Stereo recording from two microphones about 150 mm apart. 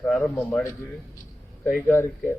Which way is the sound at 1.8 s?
15° left (ahead or behind).